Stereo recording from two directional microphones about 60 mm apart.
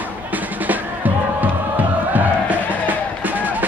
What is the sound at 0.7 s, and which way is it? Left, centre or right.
Music, right.